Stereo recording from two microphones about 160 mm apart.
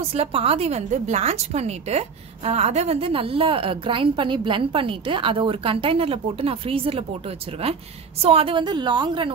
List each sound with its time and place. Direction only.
0.1 s a woman's voice: 35° right (ahead or behind)